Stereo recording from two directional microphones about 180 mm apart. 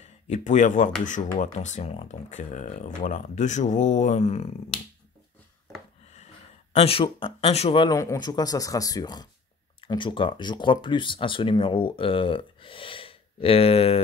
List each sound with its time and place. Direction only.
0.3 s speech: 45° left (ahead or behind)
6.7 s speech: 35° left (ahead or behind)